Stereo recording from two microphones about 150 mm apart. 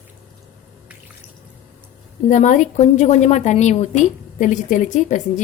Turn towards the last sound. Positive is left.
turn(degrees=55)  # may be behind; listen again after turning